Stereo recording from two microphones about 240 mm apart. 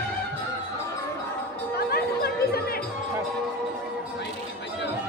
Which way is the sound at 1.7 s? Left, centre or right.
Left.